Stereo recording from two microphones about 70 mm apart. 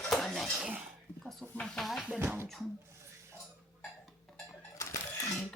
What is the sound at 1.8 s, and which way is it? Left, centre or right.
Cutlery, centre.